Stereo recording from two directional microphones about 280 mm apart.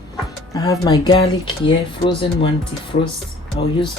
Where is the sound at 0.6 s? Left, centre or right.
Centre.